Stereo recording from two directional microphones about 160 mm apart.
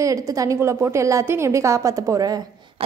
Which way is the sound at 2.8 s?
35° right (ahead or behind).